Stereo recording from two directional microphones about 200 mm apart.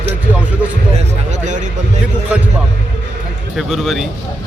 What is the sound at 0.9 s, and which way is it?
Speech, 35° right (ahead or behind).